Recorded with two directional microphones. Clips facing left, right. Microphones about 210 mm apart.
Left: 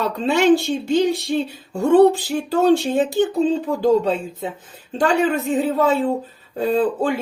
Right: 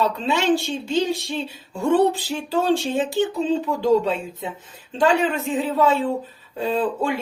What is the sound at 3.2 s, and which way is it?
Speech, 45° left (ahead or behind).